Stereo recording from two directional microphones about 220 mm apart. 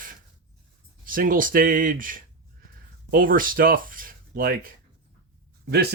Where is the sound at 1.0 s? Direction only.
40° right (ahead or behind).